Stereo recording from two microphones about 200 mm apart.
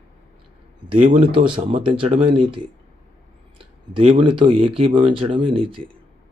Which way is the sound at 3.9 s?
30° right (ahead or behind).